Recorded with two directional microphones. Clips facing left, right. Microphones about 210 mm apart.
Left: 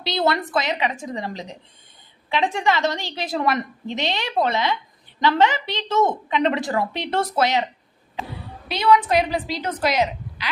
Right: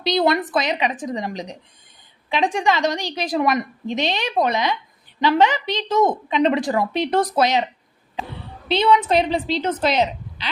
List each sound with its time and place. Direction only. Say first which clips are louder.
0.0 s a woman's voice: right 3 dB; 15° right (ahead or behind)
8.6 s a woman's voice: right 1 dB; 25° right (ahead or behind)